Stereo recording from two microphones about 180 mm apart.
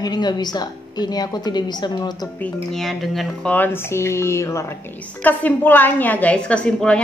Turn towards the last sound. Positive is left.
turn(degrees=5)  # may be behind; listen again after turning